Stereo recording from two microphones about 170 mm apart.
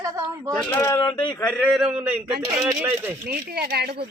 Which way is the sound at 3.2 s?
65° right (ahead or behind).